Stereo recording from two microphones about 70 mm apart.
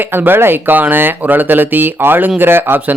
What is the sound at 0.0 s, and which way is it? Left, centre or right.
Speech, right.